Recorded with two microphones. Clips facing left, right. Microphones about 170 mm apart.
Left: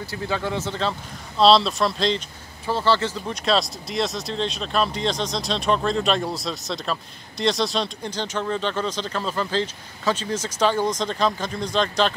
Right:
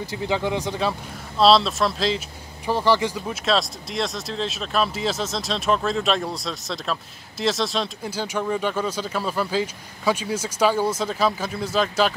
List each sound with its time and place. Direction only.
0.0 s speech: 15° right (ahead or behind)
1.4 s speech: centre (ahead or behind)
2.6 s speech: 15° right (ahead or behind)
3.4 s speech: centre (ahead or behind)